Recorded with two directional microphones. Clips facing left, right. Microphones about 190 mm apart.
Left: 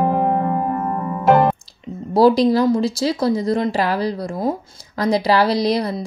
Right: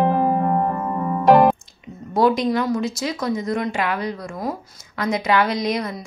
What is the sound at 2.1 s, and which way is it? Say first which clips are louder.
A woman's voice: left 5 dB; 35° left (ahead or behind).